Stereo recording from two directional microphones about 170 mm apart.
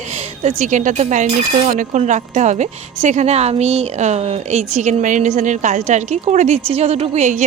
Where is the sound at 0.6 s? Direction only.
45° right (ahead or behind).